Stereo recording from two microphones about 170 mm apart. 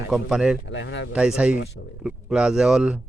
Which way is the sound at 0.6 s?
90° left.